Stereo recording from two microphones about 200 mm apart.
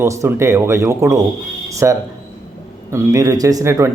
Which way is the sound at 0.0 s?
15° right (ahead or behind).